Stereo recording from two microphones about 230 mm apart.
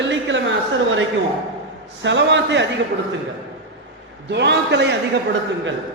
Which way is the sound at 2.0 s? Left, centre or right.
Right.